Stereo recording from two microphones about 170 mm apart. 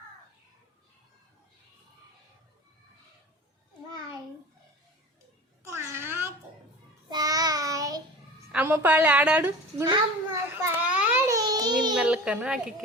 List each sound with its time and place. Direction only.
5.6 s a sound: 15° right (ahead or behind)
7.1 s child singing: 20° right (ahead or behind)
8.5 s a woman's voice: 10° right (ahead or behind)
10.3 s a sound: 15° right (ahead or behind)
11.3 s baby cry: 20° right (ahead or behind)
11.9 s a child's voice: 5° right (ahead or behind)